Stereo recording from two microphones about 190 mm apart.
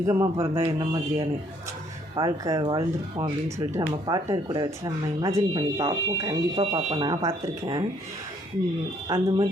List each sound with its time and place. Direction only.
0.0 s speech: 15° right (ahead or behind)
9.0 s speech: 20° right (ahead or behind)